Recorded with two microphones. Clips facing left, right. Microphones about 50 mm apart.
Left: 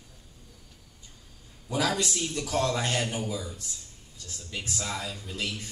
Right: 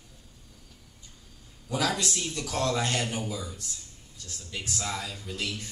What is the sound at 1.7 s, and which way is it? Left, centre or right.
A man's voice, centre.